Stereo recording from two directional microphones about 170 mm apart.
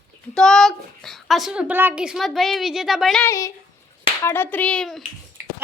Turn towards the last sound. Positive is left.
turn(degrees=5)  # may be behind; listen again after turning